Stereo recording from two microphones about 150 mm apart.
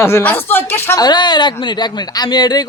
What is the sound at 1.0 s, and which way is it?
Speech, 30° left (ahead or behind).